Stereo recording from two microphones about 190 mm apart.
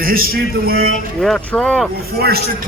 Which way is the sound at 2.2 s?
55° right (ahead or behind).